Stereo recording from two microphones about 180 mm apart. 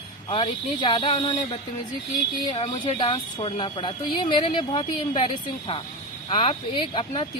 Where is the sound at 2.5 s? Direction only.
25° left (ahead or behind).